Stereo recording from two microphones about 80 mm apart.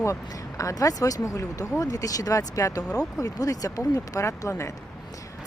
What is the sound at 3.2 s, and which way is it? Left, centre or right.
Speech, left.